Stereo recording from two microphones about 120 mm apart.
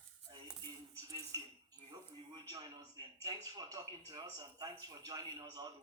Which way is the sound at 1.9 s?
40° right (ahead or behind).